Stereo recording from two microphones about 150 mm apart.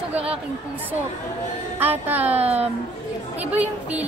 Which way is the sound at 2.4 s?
45° right (ahead or behind).